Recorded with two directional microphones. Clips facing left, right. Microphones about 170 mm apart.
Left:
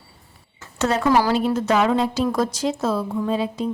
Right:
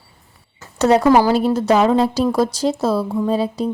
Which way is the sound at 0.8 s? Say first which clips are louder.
Right 6 dB; 40° right (ahead or behind).